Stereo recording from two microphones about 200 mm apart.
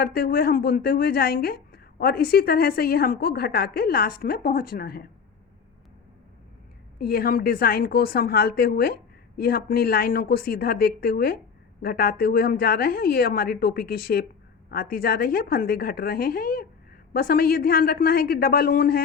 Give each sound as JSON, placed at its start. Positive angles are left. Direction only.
{"t": 0.0, "sound": "a woman's voice", "side_deg": 50}
{"t": 7.0, "sound": "a woman's voice", "side_deg": 50}